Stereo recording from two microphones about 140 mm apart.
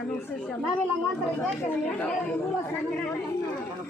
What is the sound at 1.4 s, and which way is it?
Speech, 10° left (ahead or behind).